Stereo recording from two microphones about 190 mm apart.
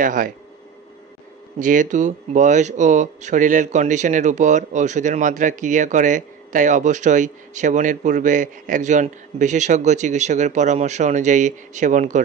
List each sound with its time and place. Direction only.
0.0 s speech: 45° right (ahead or behind)
1.6 s speech: 40° right (ahead or behind)